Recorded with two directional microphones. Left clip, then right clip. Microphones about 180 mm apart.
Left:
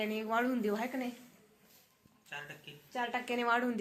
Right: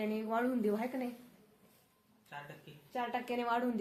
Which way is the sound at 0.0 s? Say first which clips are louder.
Left 2 dB; 5° left (ahead or behind).